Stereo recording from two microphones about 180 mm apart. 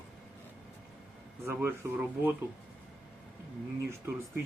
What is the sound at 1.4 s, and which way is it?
Speech, 15° right (ahead or behind).